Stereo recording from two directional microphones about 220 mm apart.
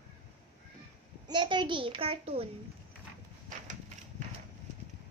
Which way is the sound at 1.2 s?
20° right (ahead or behind).